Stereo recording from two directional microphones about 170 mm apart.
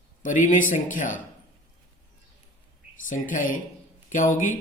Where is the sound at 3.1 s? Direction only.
50° left (ahead or behind).